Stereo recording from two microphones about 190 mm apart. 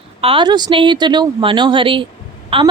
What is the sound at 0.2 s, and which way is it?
A woman's voice, 25° right (ahead or behind).